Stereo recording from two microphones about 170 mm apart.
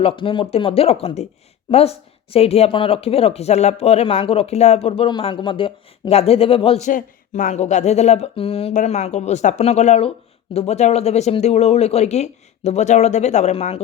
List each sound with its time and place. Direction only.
0.0 s speech: 30° left (ahead or behind)
6.8 s speech: 50° left (ahead or behind)